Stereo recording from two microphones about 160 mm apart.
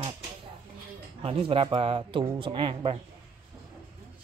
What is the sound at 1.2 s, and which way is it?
Speech, 35° right (ahead or behind).